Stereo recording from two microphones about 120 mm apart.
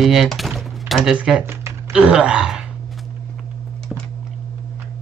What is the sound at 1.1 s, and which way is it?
Speech, 5° right (ahead or behind).